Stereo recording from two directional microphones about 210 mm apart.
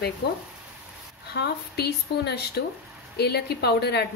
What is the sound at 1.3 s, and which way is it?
A woman's voice, 50° left (ahead or behind).